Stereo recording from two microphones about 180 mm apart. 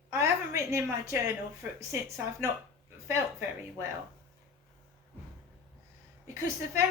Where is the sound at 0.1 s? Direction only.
15° right (ahead or behind).